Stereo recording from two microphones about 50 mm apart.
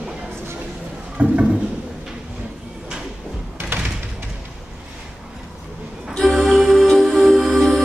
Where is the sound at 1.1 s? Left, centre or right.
Right.